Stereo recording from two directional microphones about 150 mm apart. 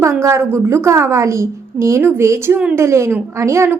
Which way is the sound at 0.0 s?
20° right (ahead or behind).